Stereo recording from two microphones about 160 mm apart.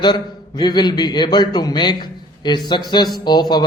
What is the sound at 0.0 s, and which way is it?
A man's voice, 25° left (ahead or behind).